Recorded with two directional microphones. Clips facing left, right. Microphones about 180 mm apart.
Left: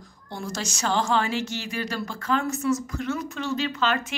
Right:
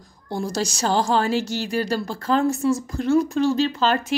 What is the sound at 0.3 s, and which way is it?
A woman's voice, 35° right (ahead or behind).